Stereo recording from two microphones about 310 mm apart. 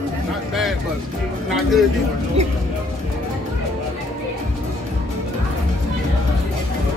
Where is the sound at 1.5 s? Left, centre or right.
Centre.